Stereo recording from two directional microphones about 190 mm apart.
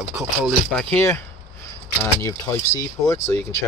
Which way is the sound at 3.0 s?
15° left (ahead or behind).